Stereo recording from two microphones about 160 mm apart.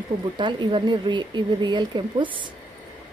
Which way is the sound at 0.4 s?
30° right (ahead or behind).